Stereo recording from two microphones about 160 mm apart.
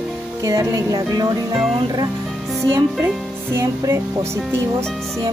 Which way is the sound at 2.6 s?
15° right (ahead or behind).